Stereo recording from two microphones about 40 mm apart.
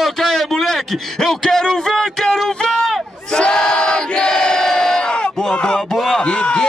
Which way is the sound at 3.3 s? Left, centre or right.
Centre.